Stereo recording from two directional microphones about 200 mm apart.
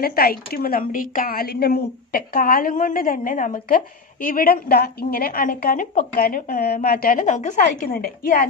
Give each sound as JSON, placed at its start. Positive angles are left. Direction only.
{"t": 0.0, "sound": "a woman's voice", "side_deg": 50}